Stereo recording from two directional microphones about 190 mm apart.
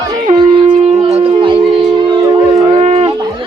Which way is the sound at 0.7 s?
35° right (ahead or behind).